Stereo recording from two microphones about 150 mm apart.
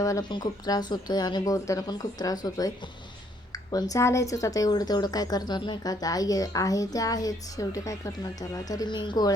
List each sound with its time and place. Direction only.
0.0 s speech: 25° left (ahead or behind)